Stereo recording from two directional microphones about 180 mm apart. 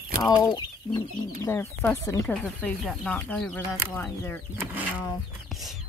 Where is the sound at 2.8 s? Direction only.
Centre (ahead or behind).